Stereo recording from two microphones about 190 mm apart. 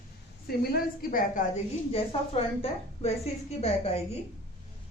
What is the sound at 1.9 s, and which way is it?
A woman's voice, 30° left (ahead or behind).